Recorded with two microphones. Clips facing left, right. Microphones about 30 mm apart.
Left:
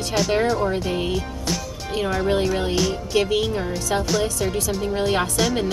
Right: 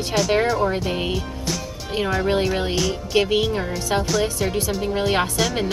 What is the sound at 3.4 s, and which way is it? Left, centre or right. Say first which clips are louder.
Speech: right 1 dB; centre.